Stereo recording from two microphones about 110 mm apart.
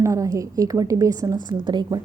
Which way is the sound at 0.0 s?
30° right (ahead or behind).